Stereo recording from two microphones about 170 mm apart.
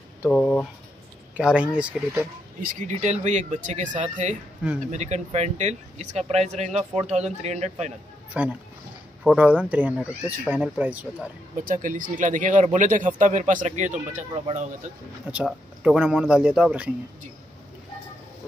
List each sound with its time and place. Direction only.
0.3 s speech: 5° left (ahead or behind)
1.3 s speech: 5° right (ahead or behind)
2.6 s speech: 45° right (ahead or behind)
4.6 s speech: 10° right (ahead or behind)
4.9 s speech: 40° right (ahead or behind)
8.3 s speech: 10° right (ahead or behind)
11.6 s speech: 50° right (ahead or behind)
15.3 s speech: 5° right (ahead or behind)